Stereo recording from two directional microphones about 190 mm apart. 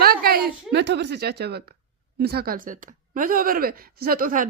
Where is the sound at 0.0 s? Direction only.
55° right (ahead or behind).